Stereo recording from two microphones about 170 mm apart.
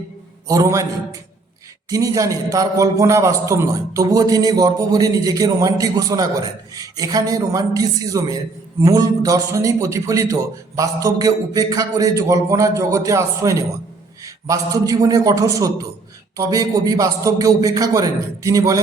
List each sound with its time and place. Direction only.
0.4 s a man's voice: 20° right (ahead or behind)
1.9 s a man's voice: 20° right (ahead or behind)